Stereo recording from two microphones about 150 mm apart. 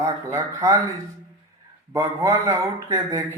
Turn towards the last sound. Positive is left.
turn(degrees=-25)  # may be behind; listen again after turning